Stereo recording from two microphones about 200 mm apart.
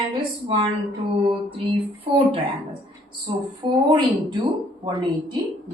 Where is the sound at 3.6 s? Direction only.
25° right (ahead or behind).